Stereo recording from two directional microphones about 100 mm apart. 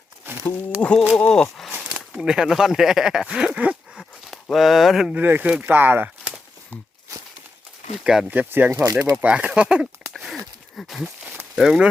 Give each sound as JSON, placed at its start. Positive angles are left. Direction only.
{"t": 0.3, "sound": "wild animals", "side_deg": -20}
{"t": 0.8, "sound": "speech", "side_deg": 10}
{"t": 2.1, "sound": "speech", "side_deg": -5}
{"t": 4.3, "sound": "speech", "side_deg": 0}
{"t": 5.1, "sound": "speech", "side_deg": -20}
{"t": 8.0, "sound": "speech", "side_deg": -5}
{"t": 8.7, "sound": "speech", "side_deg": -35}
{"t": 9.2, "sound": "a sound", "side_deg": -15}
{"t": 11.2, "sound": "a sound", "side_deg": -25}
{"t": 11.5, "sound": "speech", "side_deg": -5}